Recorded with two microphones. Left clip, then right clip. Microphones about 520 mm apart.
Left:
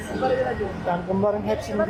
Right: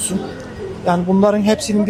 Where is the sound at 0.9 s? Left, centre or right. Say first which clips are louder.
Right 9 dB; right.